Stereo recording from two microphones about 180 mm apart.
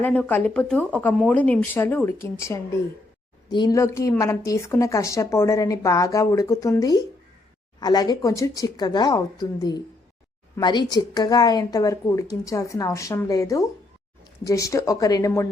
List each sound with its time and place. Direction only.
0.0 s a woman's voice: 5° left (ahead or behind)
3.5 s a woman's voice: 20° left (ahead or behind)